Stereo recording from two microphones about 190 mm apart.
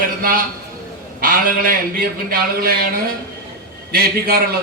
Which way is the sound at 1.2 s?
45° right (ahead or behind).